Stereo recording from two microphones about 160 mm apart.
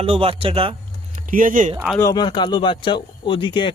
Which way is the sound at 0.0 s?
35° right (ahead or behind).